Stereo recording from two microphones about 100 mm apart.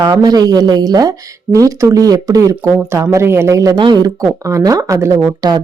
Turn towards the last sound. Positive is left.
turn(degrees=-40)  # may be behind; listen again after turning